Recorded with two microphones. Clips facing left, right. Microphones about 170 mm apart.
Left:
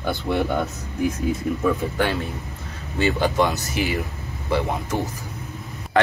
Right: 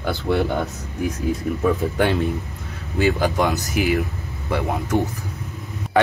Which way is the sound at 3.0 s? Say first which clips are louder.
Right 1 dB; 5° right (ahead or behind).